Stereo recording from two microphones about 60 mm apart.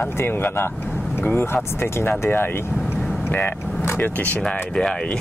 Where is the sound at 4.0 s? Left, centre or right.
Left.